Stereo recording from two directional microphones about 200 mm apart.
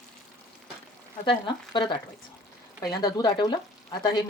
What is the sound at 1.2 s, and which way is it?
Speech, 25° left (ahead or behind).